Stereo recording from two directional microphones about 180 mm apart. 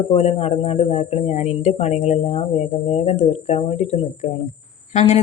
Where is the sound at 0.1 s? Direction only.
35° left (ahead or behind).